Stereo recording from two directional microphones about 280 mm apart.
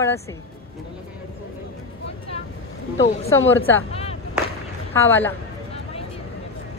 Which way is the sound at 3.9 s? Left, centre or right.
Left.